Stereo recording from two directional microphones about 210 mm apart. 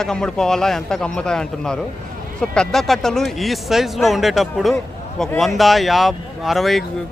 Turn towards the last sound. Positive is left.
turn(degrees=0)  # may be behind; listen again after turning